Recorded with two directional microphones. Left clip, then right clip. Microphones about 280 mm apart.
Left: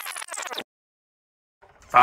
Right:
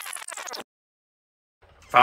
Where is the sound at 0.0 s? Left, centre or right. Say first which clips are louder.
Left 3 dB; centre.